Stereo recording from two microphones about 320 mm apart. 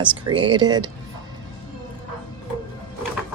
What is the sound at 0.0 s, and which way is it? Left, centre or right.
Speech, centre.